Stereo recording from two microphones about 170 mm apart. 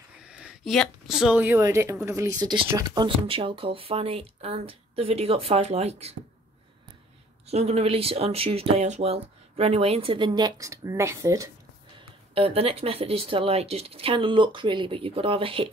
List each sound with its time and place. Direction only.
0.2 s speech: 5° right (ahead or behind); by 6.1 s 40° right (ahead or behind)
7.4 s speech: 40° right (ahead or behind); by 11.5 s 20° right (ahead or behind)
12.4 s speech: 35° right (ahead or behind)